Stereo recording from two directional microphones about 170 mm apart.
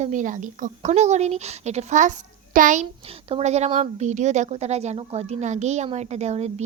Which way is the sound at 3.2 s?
40° right (ahead or behind).